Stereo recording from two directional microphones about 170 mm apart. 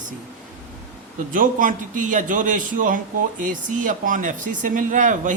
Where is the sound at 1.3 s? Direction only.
50° right (ahead or behind).